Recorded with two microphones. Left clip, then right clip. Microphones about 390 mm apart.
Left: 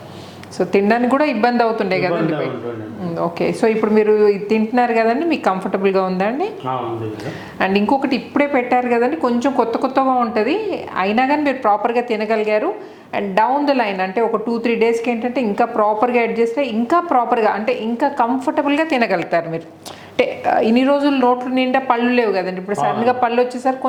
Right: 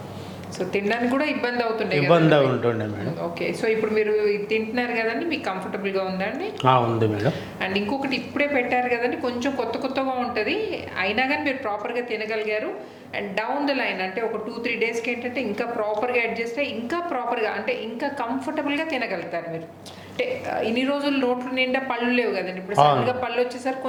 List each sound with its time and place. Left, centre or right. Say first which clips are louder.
0.7 s a woman's voice: left 8 dB; left
3.2 s a woman's voice: left 10 dB; left
7.6 s a woman's voice: left 10 dB; left